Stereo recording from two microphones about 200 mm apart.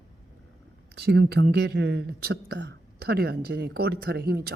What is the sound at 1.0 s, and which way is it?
Speech, 55° right (ahead or behind).